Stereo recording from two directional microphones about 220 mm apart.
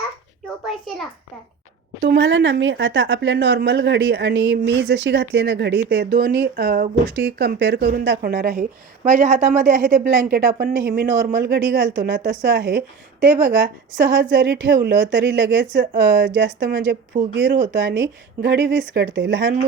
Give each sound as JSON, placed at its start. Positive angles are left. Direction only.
{"t": 0.4, "sound": "a sound", "side_deg": 0}
{"t": 2.0, "sound": "a woman's voice", "side_deg": -50}
{"t": 14.2, "sound": "a woman's voice", "side_deg": -55}